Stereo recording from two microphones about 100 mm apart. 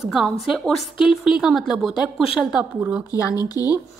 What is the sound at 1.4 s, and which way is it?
Speech, centre (ahead or behind).